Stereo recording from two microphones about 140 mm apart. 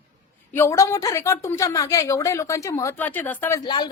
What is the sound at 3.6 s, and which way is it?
Speech, 30° left (ahead or behind).